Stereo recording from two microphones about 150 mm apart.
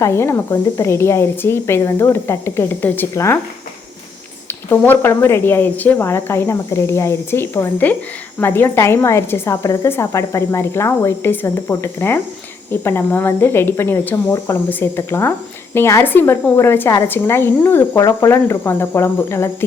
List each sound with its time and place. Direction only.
0.0 s a woman's voice: 20° left (ahead or behind)
4.4 s a woman's voice: 15° left (ahead or behind)